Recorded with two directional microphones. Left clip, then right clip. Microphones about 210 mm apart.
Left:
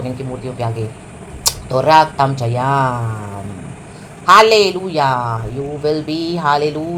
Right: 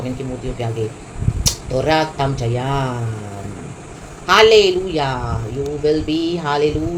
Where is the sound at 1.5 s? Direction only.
15° left (ahead or behind).